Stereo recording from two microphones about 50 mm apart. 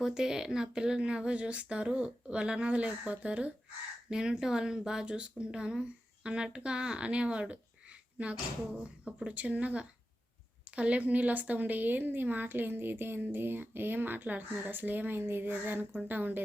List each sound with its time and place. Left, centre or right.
0.0 s a woman's voice: centre; by 16.4 s right